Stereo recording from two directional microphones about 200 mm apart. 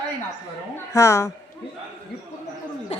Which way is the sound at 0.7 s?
15° left (ahead or behind).